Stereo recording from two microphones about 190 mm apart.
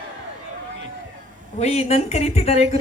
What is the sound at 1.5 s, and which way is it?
A man's voice, 35° left (ahead or behind).